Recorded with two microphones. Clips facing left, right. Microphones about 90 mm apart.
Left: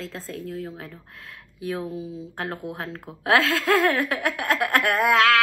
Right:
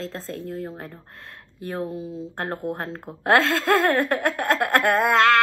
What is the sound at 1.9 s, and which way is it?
Speech, 5° left (ahead or behind).